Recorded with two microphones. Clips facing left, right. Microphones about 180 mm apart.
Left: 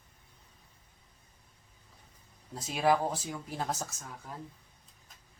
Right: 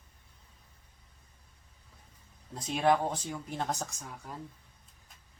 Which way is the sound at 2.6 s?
5° left (ahead or behind).